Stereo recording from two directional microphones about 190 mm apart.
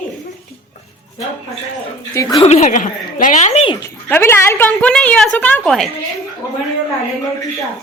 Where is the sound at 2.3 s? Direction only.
35° left (ahead or behind).